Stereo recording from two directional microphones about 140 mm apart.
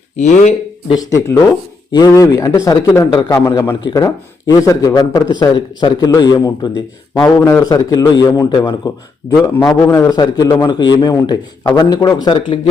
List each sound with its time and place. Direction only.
0.2 s speech: 55° left (ahead or behind)
0.9 s a man's voice: 25° left (ahead or behind)